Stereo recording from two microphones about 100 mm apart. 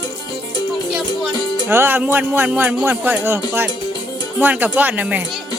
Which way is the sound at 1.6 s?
20° right (ahead or behind).